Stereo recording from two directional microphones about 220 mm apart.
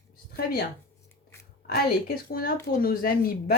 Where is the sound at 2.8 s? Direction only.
40° left (ahead or behind).